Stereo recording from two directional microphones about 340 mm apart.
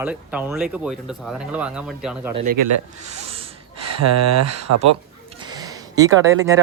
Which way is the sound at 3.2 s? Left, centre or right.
Centre.